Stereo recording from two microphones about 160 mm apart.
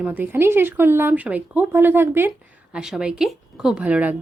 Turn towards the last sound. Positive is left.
turn(degrees=-10)  # may be behind; listen again after turning